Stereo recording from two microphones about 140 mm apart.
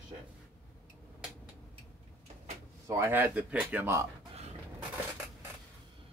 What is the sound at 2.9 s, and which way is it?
Speech, 15° right (ahead or behind).